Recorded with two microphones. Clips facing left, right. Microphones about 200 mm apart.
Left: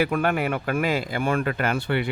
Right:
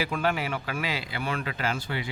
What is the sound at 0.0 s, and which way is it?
Speech, 55° left (ahead or behind).